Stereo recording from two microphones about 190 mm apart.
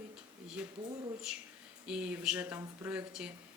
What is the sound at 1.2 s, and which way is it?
Speech, centre (ahead or behind).